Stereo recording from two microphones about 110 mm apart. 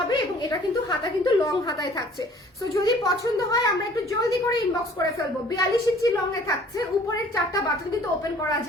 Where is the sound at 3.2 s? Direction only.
30° left (ahead or behind).